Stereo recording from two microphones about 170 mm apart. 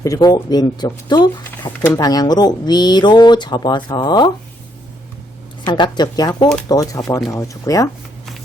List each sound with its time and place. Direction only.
0.0 s speech: 20° left (ahead or behind)
5.6 s speech: 25° left (ahead or behind)